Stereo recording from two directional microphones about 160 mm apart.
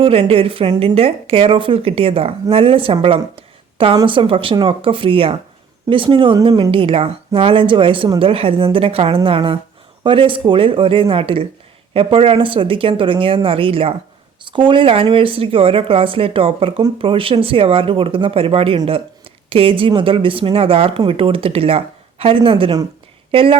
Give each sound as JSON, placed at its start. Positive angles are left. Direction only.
{"t": 0.0, "sound": "speech", "side_deg": -35}